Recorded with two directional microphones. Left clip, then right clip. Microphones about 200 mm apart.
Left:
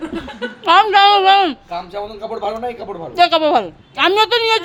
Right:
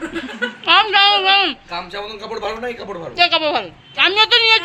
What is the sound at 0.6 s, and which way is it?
Speech, 45° left (ahead or behind).